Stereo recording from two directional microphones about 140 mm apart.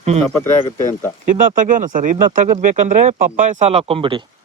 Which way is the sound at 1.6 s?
70° right (ahead or behind).